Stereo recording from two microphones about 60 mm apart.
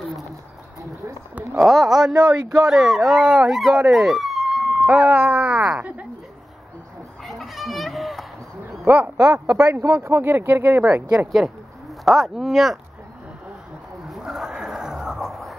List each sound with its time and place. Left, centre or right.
1.6 s speech: centre
3.9 s a sound: centre
4.8 s speech: right
5.8 s a sound: right
7.2 s goat: centre
8.8 s speech: right
9.1 s speech: right
10.0 s speech: right
12.0 s speech: centre
14.0 s a sound: centre